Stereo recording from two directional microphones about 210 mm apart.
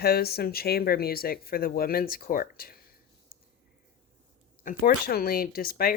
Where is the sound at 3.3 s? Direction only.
45° left (ahead or behind).